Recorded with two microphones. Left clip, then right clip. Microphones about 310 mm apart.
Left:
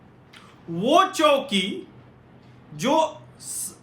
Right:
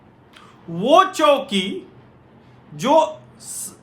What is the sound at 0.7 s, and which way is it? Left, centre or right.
Speech, centre.